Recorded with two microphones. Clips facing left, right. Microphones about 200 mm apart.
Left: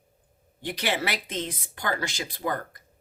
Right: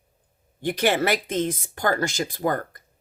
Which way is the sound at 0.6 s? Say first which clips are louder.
Right 7 dB; 50° right (ahead or behind).